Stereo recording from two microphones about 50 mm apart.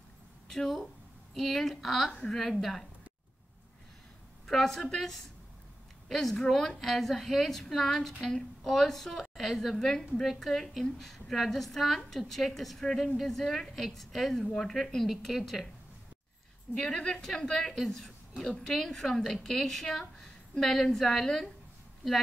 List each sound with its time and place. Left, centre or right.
0.5 s a woman's voice: centre
4.5 s a woman's voice: centre
16.7 s a woman's voice: centre